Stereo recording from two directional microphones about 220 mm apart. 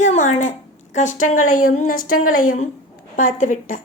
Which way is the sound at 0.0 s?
35° left (ahead or behind).